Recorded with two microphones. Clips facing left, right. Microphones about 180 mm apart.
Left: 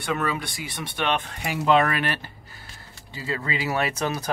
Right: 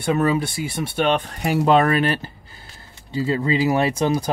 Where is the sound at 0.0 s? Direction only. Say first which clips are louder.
Right 7 dB; 30° right (ahead or behind).